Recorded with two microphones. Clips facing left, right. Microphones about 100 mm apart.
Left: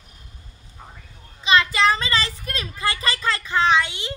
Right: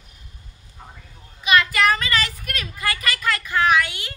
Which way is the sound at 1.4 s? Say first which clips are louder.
Even; 25° left (ahead or behind).